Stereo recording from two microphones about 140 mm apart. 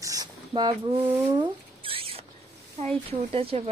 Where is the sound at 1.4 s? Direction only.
40° right (ahead or behind).